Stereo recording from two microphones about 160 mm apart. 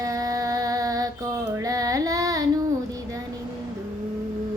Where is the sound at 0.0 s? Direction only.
20° right (ahead or behind).